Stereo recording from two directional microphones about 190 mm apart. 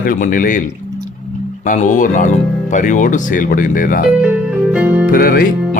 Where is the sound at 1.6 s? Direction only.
40° left (ahead or behind).